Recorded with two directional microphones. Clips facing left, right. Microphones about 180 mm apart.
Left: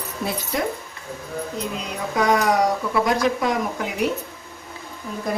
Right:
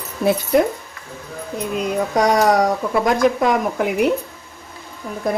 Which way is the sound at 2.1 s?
45° right (ahead or behind).